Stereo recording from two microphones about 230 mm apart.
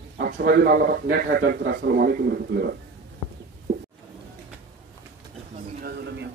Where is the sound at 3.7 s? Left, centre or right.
Right.